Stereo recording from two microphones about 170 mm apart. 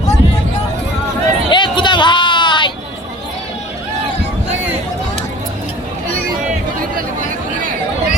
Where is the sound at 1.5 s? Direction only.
30° left (ahead or behind).